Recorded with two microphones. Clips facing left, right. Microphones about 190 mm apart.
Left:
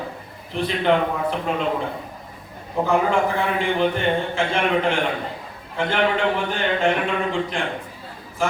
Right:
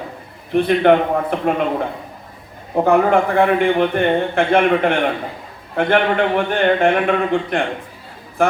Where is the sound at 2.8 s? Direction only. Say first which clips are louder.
Right 5 dB; 60° right (ahead or behind).